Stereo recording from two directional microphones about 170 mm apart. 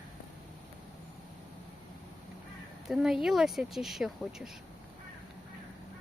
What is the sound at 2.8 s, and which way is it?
A woman's voice, 5° right (ahead or behind).